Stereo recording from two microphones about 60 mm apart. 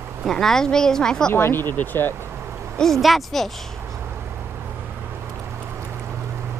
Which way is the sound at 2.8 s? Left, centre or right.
Centre.